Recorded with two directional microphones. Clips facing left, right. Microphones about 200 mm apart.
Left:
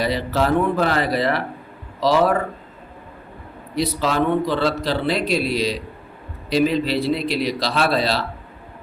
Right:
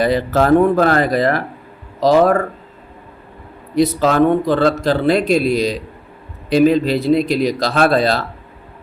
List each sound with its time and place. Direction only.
0.0 s speech: 50° right (ahead or behind)
3.8 s speech: 50° right (ahead or behind)